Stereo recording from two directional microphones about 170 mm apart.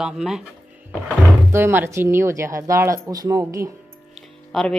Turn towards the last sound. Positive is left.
turn(degrees=0)  # may be behind; listen again after turning